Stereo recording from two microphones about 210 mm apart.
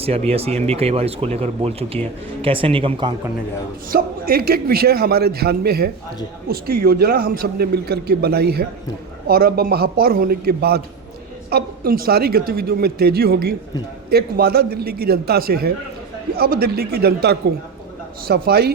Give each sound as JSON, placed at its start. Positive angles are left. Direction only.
{"t": 0.0, "sound": "speech", "side_deg": -30}
{"t": 3.8, "sound": "a man's voice", "side_deg": -45}